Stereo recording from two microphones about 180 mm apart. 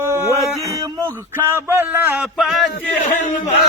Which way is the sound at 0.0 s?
15° right (ahead or behind).